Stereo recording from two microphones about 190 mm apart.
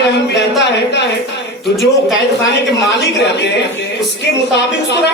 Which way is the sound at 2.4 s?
65° left (ahead or behind).